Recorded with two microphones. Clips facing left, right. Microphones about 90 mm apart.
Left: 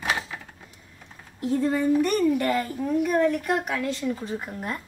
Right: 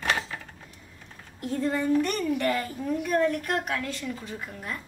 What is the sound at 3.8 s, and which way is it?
Speech, 20° left (ahead or behind).